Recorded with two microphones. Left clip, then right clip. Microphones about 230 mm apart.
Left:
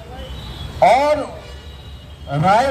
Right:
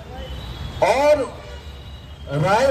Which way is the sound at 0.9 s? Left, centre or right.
Right.